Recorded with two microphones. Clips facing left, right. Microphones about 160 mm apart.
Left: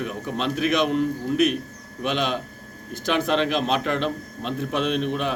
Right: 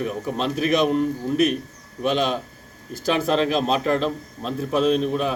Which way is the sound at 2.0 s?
35° right (ahead or behind).